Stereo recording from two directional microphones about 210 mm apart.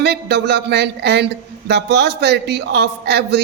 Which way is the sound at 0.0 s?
50° right (ahead or behind).